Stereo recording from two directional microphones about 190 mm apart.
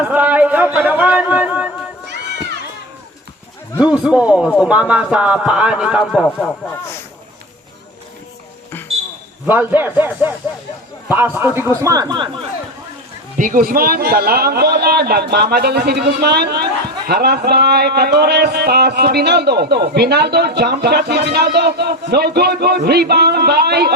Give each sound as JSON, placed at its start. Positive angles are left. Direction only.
{"t": 0.0, "sound": "a sound", "side_deg": -10}
{"t": 3.8, "sound": "a man's voice", "side_deg": -5}
{"t": 9.5, "sound": "speech", "side_deg": -10}
{"t": 13.3, "sound": "a man's voice", "side_deg": -45}